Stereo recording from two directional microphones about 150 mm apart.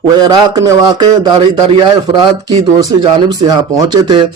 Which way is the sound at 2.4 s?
25° right (ahead or behind).